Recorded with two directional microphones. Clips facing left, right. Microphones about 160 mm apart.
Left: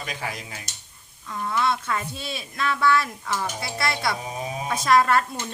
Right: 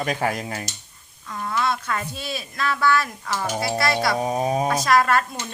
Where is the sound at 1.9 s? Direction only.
25° left (ahead or behind).